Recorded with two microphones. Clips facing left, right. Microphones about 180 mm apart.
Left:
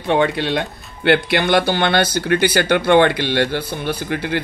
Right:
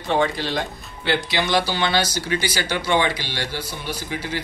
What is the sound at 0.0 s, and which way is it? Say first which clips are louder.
Speech: left 4 dB; 65° left (ahead or behind).